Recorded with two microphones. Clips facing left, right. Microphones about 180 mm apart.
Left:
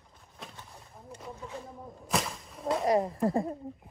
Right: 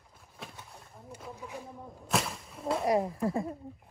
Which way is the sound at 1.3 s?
10° right (ahead or behind).